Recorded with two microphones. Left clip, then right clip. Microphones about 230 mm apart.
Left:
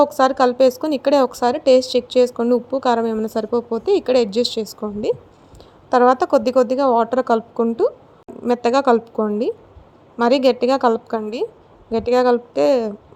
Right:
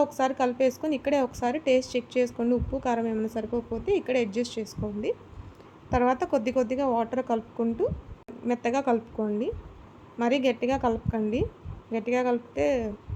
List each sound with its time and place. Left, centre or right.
0.0 s a woman's voice: left
5.9 s a woman's voice: left